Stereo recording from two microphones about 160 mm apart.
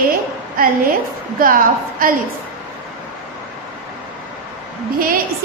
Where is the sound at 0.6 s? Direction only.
65° right (ahead or behind).